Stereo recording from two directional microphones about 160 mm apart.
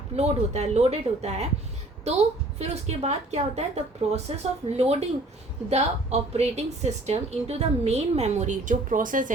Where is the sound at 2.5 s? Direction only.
45° right (ahead or behind).